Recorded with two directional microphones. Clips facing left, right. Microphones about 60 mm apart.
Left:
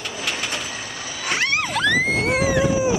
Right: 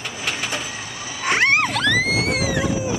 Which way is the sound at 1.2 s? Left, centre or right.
Right.